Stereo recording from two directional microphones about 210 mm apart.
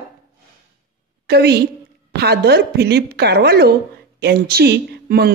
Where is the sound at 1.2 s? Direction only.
50° right (ahead or behind).